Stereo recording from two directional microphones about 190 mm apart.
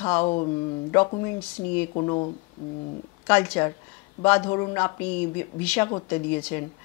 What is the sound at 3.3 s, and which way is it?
A man's voice, 10° left (ahead or behind).